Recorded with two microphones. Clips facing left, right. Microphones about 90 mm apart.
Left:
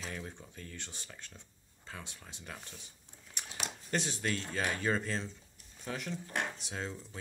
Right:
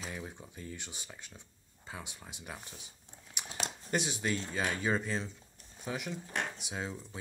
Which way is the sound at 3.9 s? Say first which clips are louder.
Right 1 dB; 10° right (ahead or behind).